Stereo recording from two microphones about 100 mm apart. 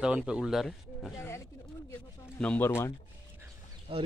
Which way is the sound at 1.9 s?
15° left (ahead or behind).